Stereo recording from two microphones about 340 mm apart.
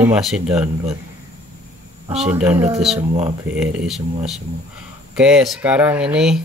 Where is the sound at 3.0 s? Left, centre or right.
Centre.